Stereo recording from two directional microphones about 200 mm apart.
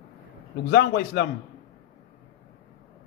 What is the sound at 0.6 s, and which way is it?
Speech, 55° left (ahead or behind).